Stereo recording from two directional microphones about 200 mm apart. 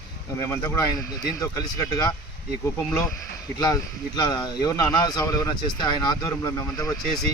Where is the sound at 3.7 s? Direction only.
20° left (ahead or behind).